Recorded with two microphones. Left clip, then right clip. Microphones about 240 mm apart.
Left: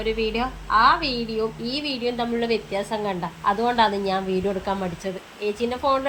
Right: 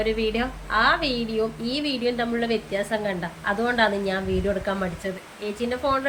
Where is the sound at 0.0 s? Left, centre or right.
Centre.